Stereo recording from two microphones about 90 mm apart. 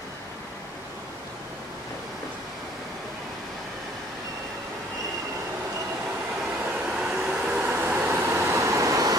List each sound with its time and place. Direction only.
6.9 s vehicle: 10° right (ahead or behind)
7.7 s vehicle: 20° right (ahead or behind); by 9.1 s 40° right (ahead or behind)